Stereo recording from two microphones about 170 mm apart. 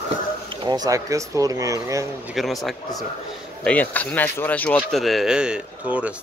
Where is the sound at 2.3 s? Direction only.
Centre (ahead or behind).